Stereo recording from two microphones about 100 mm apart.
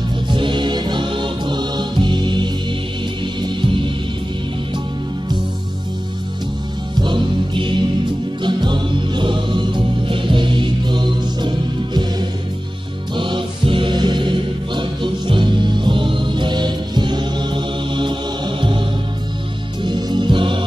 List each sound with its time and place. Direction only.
0.3 s music: 55° right (ahead or behind)
7.0 s music: 55° right (ahead or behind)
17.9 s mantra: 55° right (ahead or behind)
19.8 s music: 50° right (ahead or behind)